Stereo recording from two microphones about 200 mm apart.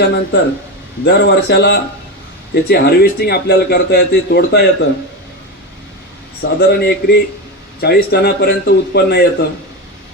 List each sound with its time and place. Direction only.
0.0 s a man's voice: 60° left (ahead or behind)
6.4 s a man's voice: 55° left (ahead or behind)